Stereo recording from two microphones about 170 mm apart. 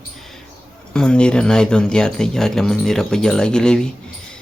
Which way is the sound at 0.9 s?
5° left (ahead or behind).